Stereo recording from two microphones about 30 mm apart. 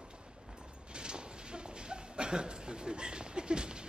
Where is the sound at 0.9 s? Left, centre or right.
Right.